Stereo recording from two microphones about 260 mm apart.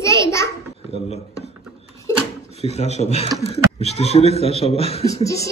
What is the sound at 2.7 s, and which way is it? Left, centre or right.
Speech, left.